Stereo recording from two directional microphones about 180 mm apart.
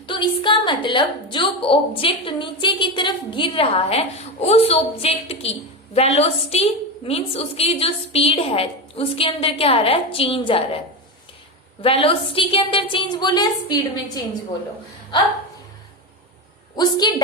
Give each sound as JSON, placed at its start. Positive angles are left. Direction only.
{"t": 0.0, "sound": "a woman's voice", "side_deg": 25}
{"t": 16.7, "sound": "a woman's voice", "side_deg": 25}